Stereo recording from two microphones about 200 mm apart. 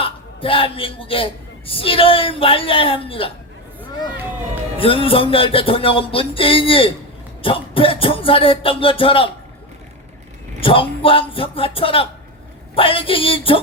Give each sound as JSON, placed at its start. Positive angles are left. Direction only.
{"t": 0.0, "sound": "a man's voice", "side_deg": 25}
{"t": 4.8, "sound": "a man's voice", "side_deg": 25}
{"t": 10.6, "sound": "a man's voice", "side_deg": 25}